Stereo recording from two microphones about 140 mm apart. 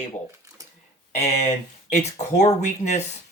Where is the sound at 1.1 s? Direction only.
50° left (ahead or behind).